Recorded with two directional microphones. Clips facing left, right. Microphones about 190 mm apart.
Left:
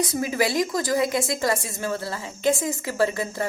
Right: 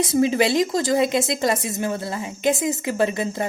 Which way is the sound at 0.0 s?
25° right (ahead or behind).